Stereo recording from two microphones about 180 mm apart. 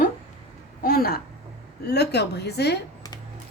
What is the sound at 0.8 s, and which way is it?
A woman's voice, 55° left (ahead or behind).